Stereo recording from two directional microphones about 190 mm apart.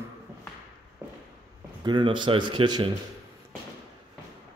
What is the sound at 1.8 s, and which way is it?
Speech, 25° right (ahead or behind).